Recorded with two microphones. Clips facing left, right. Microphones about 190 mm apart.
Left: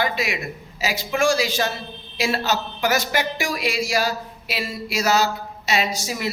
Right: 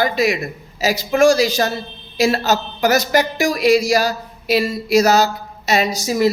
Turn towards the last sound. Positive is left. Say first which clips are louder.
# right 7 dB
turn(degrees=-40)  # may be behind; listen again after turning